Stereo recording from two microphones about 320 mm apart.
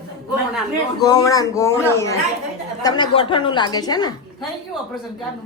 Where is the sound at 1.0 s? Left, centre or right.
Centre.